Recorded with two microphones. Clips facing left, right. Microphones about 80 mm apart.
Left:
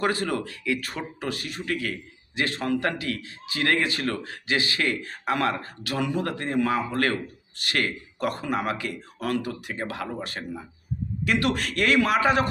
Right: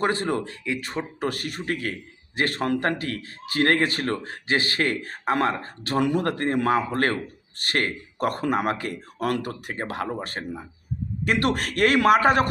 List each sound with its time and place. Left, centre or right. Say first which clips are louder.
0.0 s a man's voice: right 1 dB; right
1.2 s a man's voice: right 3 dB; right
6.0 s speech: right 5 dB; right